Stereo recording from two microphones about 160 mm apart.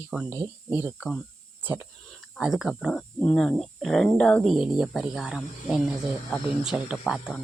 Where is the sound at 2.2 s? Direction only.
5° right (ahead or behind).